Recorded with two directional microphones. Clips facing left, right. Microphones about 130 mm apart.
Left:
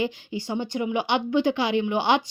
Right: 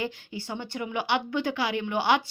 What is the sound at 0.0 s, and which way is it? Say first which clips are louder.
A woman's voice: left 5 dB; 15° left (ahead or behind).